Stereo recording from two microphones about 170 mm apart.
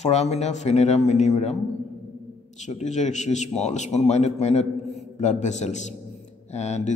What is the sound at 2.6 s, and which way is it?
A man's voice, 45° left (ahead or behind).